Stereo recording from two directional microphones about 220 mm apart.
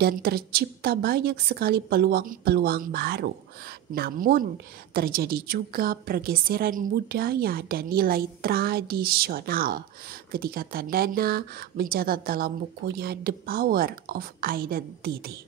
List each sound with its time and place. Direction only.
0.0 s speech: 45° right (ahead or behind)